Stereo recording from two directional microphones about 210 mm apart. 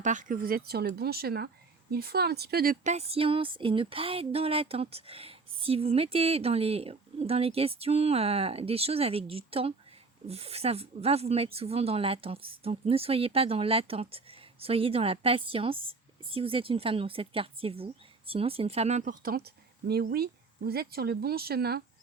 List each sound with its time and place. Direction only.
0.0 s speech: 35° right (ahead or behind)